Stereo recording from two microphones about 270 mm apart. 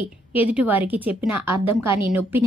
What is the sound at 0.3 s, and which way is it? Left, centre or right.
A woman's voice, centre.